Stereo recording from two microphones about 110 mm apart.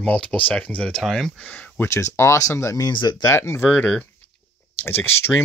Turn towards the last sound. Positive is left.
turn(degrees=20)  # may be behind; listen again after turning